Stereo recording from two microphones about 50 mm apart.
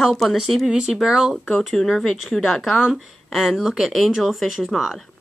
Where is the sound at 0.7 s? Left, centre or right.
Centre.